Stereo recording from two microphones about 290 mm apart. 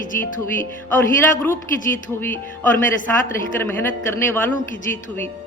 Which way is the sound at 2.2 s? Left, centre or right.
Centre.